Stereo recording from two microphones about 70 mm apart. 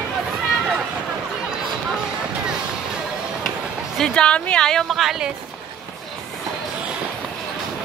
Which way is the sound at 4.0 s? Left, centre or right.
Centre.